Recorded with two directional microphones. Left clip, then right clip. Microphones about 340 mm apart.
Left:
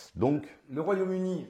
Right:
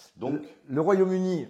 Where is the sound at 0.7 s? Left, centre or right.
Right.